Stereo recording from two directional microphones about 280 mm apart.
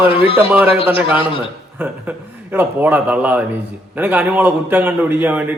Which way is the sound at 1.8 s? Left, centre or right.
Centre.